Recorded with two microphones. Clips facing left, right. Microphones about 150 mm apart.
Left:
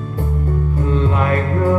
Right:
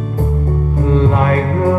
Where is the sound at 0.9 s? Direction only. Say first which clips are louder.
Right 5 dB; 40° right (ahead or behind).